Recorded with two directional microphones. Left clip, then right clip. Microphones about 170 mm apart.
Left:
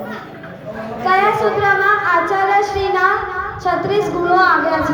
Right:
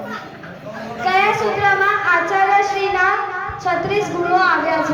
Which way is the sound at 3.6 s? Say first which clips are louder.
Left 2 dB; 25° left (ahead or behind).